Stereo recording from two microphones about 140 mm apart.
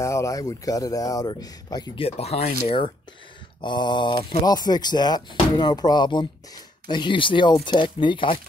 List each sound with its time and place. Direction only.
0.0 s speech: 20° left (ahead or behind)
2.0 s speech: 45° left (ahead or behind)